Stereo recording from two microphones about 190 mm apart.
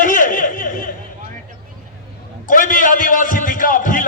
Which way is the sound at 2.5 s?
45° left (ahead or behind).